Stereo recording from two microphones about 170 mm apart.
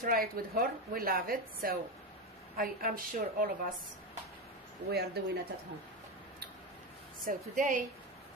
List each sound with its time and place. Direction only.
0.0 s speech: 55° right (ahead or behind)
4.9 s speech: 70° right (ahead or behind)
7.2 s a woman's voice: 50° right (ahead or behind)